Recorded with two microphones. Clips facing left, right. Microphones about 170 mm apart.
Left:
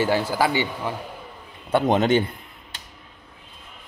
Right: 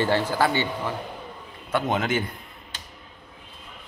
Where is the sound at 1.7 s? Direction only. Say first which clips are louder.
Left 6 dB; 35° left (ahead or behind).